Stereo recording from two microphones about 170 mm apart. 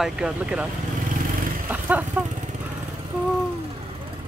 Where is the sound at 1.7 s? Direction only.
10° right (ahead or behind).